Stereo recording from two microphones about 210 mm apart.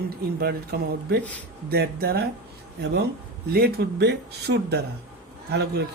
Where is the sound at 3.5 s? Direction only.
50° right (ahead or behind).